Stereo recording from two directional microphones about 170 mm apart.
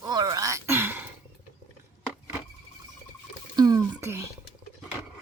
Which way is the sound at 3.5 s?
25° right (ahead or behind).